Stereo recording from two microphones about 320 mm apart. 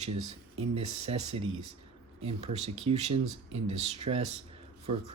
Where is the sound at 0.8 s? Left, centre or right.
Right.